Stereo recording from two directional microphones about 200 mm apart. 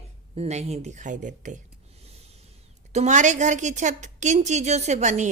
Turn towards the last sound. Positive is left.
turn(degrees=-35)  # may be behind; listen again after turning